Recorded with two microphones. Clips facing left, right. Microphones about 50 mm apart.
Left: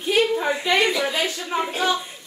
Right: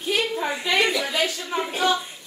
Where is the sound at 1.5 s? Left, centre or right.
Centre.